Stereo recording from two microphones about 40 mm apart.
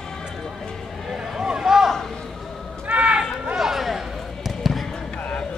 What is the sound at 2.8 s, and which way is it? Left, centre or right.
Run, right.